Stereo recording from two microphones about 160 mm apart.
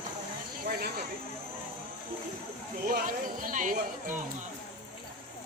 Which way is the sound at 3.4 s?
55° right (ahead or behind).